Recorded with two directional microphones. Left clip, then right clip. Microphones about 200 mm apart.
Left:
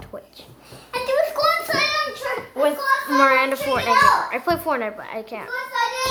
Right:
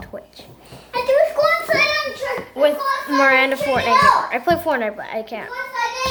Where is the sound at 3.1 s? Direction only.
Centre (ahead or behind).